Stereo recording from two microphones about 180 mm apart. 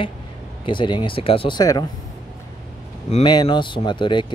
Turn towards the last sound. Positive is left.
turn(degrees=25)  # may be behind; listen again after turning